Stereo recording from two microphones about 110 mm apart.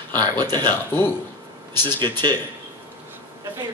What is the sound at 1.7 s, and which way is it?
Speech, 20° left (ahead or behind).